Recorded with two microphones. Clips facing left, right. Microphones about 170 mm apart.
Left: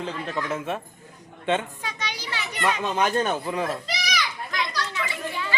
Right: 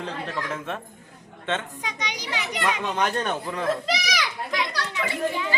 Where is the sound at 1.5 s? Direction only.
10° left (ahead or behind).